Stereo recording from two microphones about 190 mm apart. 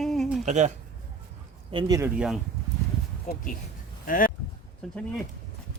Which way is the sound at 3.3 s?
40° left (ahead or behind).